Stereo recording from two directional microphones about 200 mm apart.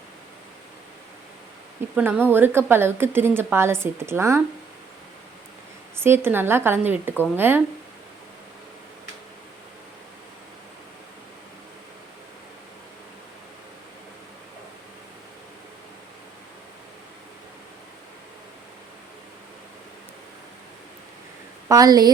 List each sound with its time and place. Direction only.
2.0 s a woman's voice: 10° right (ahead or behind)
6.0 s a woman's voice: 10° right (ahead or behind)
21.7 s a woman's voice: 20° right (ahead or behind)